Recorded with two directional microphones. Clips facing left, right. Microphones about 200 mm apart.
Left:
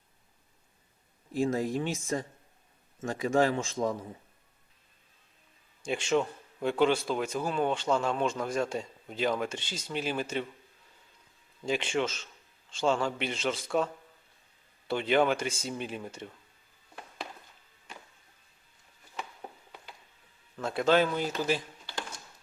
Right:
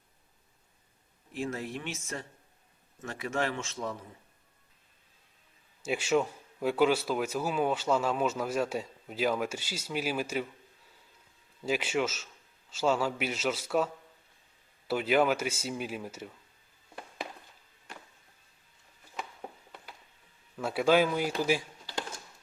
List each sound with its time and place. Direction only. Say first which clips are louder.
1.3 s speech: left 7 dB; 35° left (ahead or behind)
5.8 s a man's voice: even; 5° right (ahead or behind)
11.6 s a man's voice: even; 5° right (ahead or behind)
20.6 s a man's voice: even; 10° right (ahead or behind)